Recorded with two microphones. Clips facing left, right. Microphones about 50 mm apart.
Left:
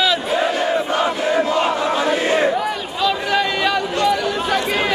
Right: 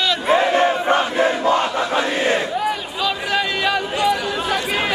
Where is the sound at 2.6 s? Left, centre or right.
Centre.